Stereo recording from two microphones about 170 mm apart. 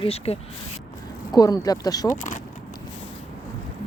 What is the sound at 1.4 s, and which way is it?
Speech, 20° left (ahead or behind).